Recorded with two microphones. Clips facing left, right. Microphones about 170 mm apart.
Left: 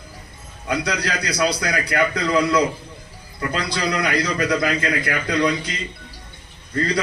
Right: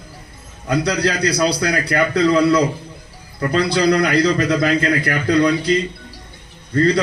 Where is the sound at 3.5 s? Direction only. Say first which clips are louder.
Right 9 dB; 35° right (ahead or behind).